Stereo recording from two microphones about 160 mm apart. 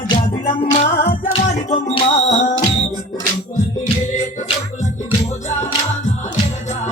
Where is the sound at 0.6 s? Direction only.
45° left (ahead or behind).